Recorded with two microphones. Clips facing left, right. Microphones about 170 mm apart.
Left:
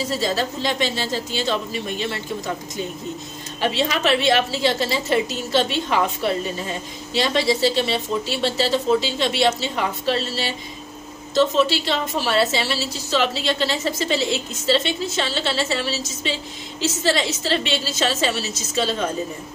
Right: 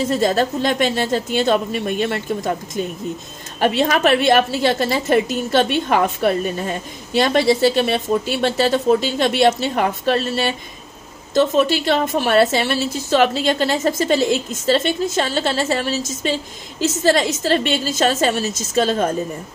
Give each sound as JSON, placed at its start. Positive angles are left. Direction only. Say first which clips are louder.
{"t": 0.1, "sound": "a woman's voice", "louder": "right 6 dB", "side_deg": -50}